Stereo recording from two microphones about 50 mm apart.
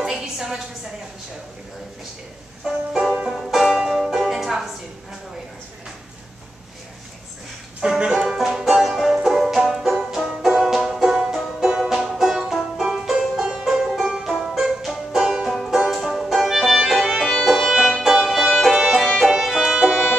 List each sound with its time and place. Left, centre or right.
0.0 s a sound: centre
2.6 s music: centre
7.8 s banjo: centre
11.6 s music: centre
12.9 s banjo: centre
13.8 s music: centre